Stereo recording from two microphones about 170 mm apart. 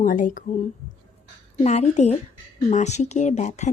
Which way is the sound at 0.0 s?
50° left (ahead or behind).